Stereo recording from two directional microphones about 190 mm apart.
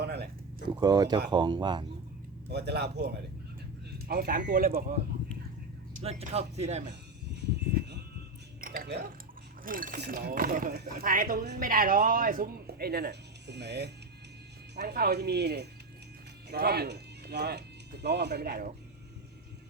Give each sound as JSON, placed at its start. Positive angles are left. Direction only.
{"t": 0.0, "sound": "a sound", "side_deg": -60}
{"t": 0.8, "sound": "speech", "side_deg": -20}
{"t": 2.5, "sound": "speech", "side_deg": -60}
{"t": 6.0, "sound": "speech", "side_deg": -30}
{"t": 8.6, "sound": "dishes", "side_deg": -50}
{"t": 9.6, "sound": "speech", "side_deg": -45}